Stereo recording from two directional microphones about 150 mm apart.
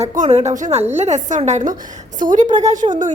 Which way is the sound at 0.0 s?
45° right (ahead or behind).